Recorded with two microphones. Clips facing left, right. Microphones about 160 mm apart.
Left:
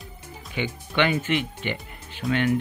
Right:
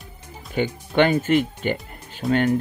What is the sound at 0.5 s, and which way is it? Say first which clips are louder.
A man's voice: right 6 dB; 45° right (ahead or behind).